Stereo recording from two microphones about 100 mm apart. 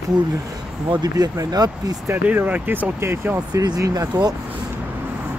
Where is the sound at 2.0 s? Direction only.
20° right (ahead or behind).